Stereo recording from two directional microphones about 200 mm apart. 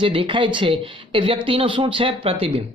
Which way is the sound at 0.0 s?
25° right (ahead or behind).